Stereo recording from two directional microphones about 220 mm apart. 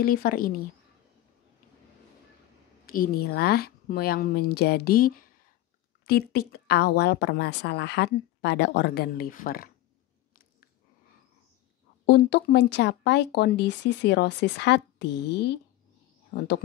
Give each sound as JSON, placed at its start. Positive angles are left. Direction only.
{"t": 0.0, "sound": "speech", "side_deg": 40}
{"t": 2.9, "sound": "speech", "side_deg": 40}
{"t": 12.1, "sound": "speech", "side_deg": 50}